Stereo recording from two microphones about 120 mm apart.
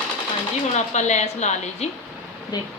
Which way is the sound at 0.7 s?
75° left (ahead or behind).